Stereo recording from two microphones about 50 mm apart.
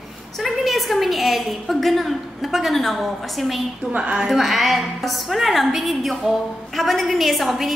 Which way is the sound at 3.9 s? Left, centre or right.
Right.